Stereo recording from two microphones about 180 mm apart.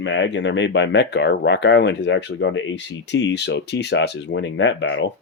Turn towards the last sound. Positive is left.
turn(degrees=85)